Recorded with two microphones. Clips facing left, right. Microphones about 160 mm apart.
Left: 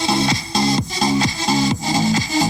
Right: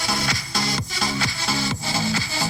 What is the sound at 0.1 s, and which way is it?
Music, 20° left (ahead or behind).